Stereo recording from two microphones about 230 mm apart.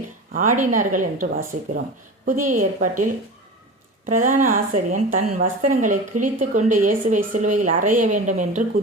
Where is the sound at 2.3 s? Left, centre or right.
Right.